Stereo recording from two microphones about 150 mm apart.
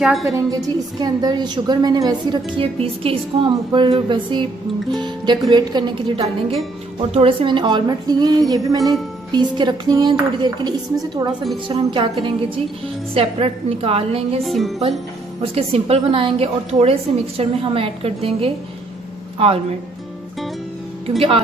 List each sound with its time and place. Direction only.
0.6 s a woman's voice: 25° right (ahead or behind); by 14.2 s 40° right (ahead or behind)
14.4 s music: centre (ahead or behind)
15.4 s a woman's voice: 40° right (ahead or behind)